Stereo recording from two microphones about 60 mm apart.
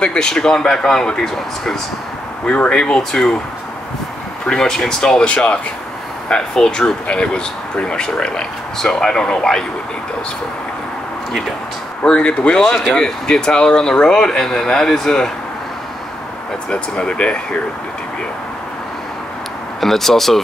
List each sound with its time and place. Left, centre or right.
0.0 s speech: centre
2.4 s speech: left
2.7 s speech: centre
4.5 s speech: centre
12.0 s speech: centre
16.7 s speech: centre
19.8 s speech: centre